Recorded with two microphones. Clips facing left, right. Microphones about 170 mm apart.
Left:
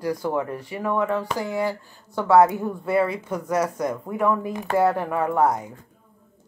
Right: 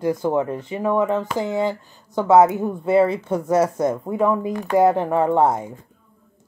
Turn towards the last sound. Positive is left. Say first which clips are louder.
# right 4 dB
turn(degrees=-25)  # may be behind; listen again after turning